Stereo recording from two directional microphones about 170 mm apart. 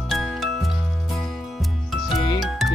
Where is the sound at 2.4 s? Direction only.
Centre (ahead or behind).